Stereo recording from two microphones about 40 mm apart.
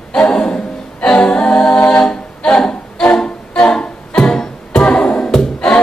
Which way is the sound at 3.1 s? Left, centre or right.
Left.